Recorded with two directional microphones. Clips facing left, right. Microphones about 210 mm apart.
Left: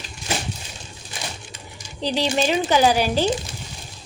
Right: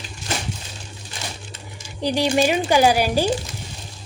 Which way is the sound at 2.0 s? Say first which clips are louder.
Right 3 dB; 10° right (ahead or behind).